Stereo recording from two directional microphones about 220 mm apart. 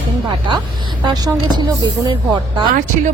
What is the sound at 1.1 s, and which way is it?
Speech, 20° right (ahead or behind).